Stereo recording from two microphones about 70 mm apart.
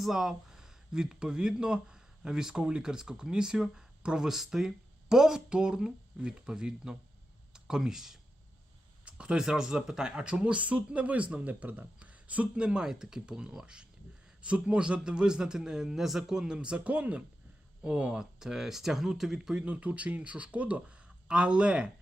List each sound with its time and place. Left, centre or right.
0.0 s speech: centre
19.6 s speech: centre